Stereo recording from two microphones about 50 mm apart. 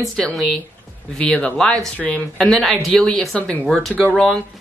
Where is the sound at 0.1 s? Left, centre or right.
Centre.